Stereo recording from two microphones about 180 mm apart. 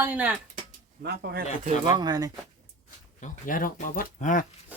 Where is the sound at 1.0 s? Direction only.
65° right (ahead or behind).